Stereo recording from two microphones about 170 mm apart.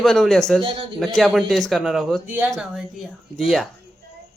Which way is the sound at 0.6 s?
35° right (ahead or behind).